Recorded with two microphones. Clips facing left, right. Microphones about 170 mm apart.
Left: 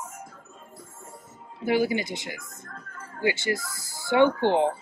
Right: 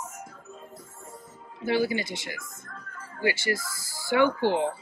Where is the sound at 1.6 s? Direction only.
15° left (ahead or behind).